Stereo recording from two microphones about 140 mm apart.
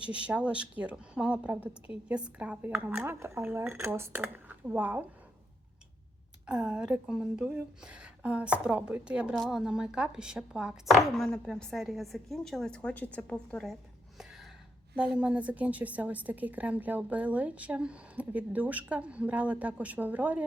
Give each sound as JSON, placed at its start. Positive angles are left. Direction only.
{"t": 0.3, "sound": "a woman's voice", "side_deg": -10}
{"t": 6.4, "sound": "speech", "side_deg": -5}
{"t": 14.9, "sound": "a woman's voice", "side_deg": -10}